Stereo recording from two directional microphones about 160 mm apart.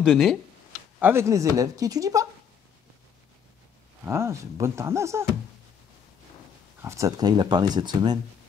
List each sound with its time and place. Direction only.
0.0 s speech: centre (ahead or behind)
0.9 s speech: 15° right (ahead or behind)
4.0 s speech: 15° right (ahead or behind)
6.8 s speech: 20° right (ahead or behind)